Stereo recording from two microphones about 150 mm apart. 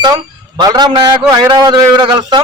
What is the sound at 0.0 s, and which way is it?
A man's voice, 30° right (ahead or behind).